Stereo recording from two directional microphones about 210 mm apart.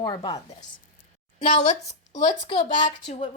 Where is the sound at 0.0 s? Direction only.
25° left (ahead or behind).